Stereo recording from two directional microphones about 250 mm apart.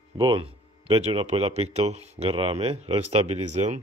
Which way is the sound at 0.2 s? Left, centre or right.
Centre.